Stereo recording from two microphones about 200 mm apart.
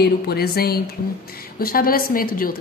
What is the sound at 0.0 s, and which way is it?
A woman's voice, 50° left (ahead or behind).